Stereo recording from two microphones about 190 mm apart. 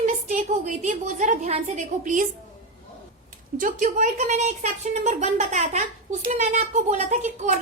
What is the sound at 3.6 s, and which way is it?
Speech, 40° right (ahead or behind).